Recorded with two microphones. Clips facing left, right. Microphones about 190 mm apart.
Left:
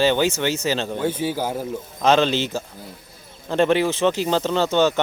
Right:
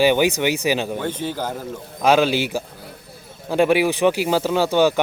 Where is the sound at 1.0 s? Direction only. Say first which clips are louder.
Left 2 dB; 10° left (ahead or behind).